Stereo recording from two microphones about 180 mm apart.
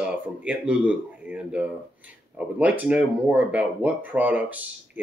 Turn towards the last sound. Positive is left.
turn(degrees=-10)  # may be behind; listen again after turning